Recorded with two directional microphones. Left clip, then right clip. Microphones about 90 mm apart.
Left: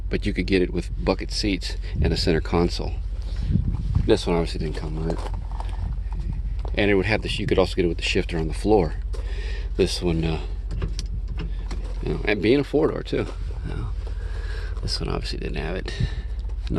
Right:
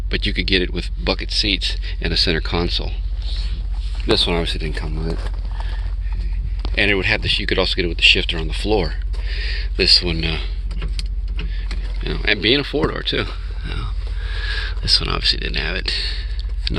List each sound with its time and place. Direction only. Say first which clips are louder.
0.1 s speech: right 5 dB; 25° left (ahead or behind); by 1.8 s 40° left (ahead or behind)
1.8 s speech: right 6 dB; 25° left (ahead or behind)
3.2 s a sound: right 10 dB; 55° left (ahead or behind)
4.3 s speech: right 3 dB; 5° left (ahead or behind)
6.7 s speech: right 3 dB; 35° left (ahead or behind)
7.0 s speech: right 6 dB; 55° left (ahead or behind); by 7.9 s 35° left (ahead or behind)
8.1 s speech: right 7 dB; 65° left (ahead or behind)
8.8 s speech: right 1 dB; 35° left (ahead or behind)
12.0 s speech: right 4 dB; 25° left (ahead or behind)
13.0 s speech: right 5 dB; 10° left (ahead or behind)
13.7 s speech: right 6 dB; 25° left (ahead or behind)
14.3 s speech: right 15 dB; 5° left (ahead or behind); by 16.1 s 35° left (ahead or behind)